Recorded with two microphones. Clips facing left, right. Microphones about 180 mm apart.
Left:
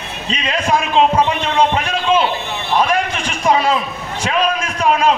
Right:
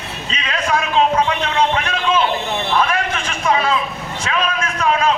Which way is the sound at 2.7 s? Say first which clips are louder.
Left 4 dB; 30° left (ahead or behind).